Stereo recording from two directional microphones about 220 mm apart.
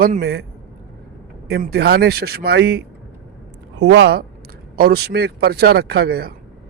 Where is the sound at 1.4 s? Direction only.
45° right (ahead or behind).